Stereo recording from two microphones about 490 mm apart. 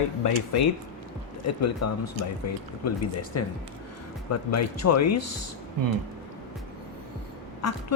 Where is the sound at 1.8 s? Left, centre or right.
Left.